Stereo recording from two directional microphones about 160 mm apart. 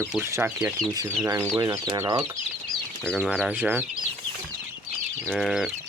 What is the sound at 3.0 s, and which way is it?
Speech, 5° left (ahead or behind).